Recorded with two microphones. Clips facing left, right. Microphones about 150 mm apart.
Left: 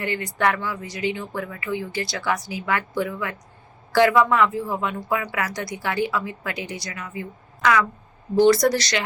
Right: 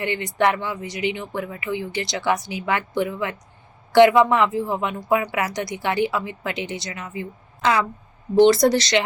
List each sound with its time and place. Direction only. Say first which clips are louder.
0.0 s a woman's voice: right 2 dB; 20° right (ahead or behind)